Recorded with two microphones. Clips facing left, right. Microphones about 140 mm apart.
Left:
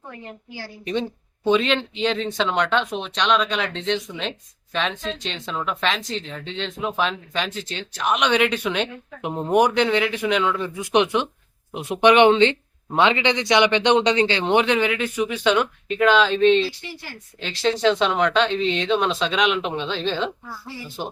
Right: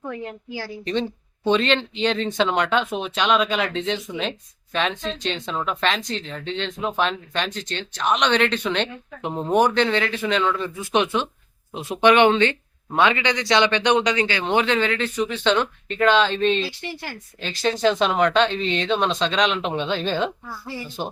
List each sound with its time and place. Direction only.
1.5 s speech: 5° left (ahead or behind)